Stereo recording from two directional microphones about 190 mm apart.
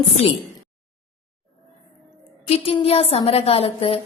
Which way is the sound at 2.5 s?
30° left (ahead or behind).